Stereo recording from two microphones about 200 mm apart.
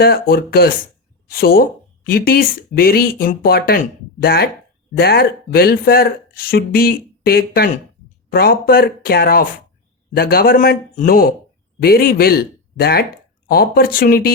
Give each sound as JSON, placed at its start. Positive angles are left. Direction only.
{"t": 0.0, "sound": "speech", "side_deg": 50}